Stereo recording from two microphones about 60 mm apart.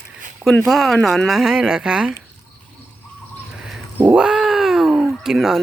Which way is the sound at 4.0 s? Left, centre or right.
Centre.